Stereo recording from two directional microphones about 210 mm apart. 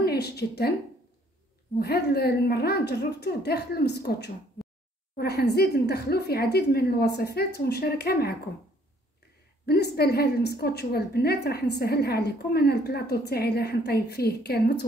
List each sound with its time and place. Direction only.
0.0 s a woman's voice: 50° left (ahead or behind)
1.8 s a woman's voice: 50° left (ahead or behind)
9.7 s a woman's voice: 50° left (ahead or behind)